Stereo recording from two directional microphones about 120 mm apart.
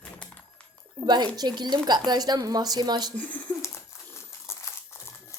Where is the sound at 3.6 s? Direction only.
20° left (ahead or behind).